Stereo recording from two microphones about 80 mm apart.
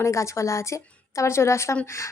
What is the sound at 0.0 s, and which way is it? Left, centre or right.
A woman's voice, left.